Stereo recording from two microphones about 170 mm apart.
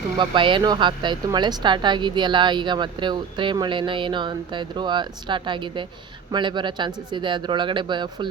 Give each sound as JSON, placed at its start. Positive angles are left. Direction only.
{"t": 0.2, "sound": "speech", "side_deg": -30}